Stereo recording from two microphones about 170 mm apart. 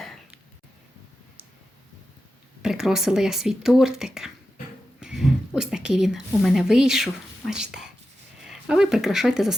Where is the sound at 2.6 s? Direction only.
5° right (ahead or behind).